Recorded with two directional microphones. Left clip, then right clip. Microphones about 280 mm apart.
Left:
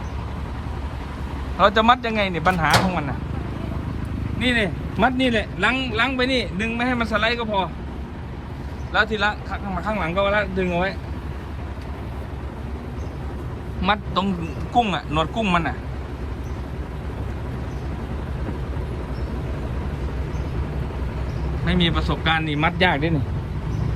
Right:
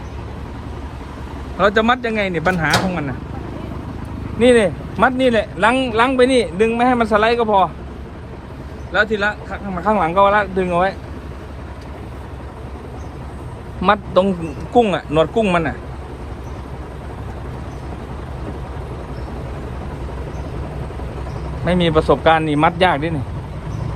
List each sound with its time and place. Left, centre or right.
1.5 s speech: centre
4.4 s speech: centre
8.9 s speech: centre
13.8 s speech: centre
21.7 s speech: centre